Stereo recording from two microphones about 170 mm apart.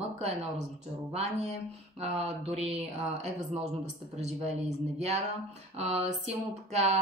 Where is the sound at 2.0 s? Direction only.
40° right (ahead or behind).